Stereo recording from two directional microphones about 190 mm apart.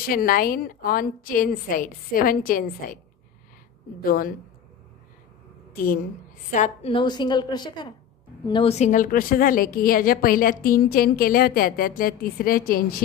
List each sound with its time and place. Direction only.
0.0 s a woman's voice: 50° left (ahead or behind)
4.0 s a woman's voice: 50° left (ahead or behind)
6.5 s a woman's voice: 40° left (ahead or behind)
6.9 s a woman's voice: 25° left (ahead or behind); by 12.8 s 50° left (ahead or behind)